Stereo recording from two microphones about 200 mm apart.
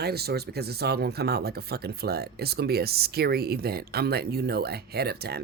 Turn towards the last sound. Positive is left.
turn(degrees=-55)  # may be behind; listen again after turning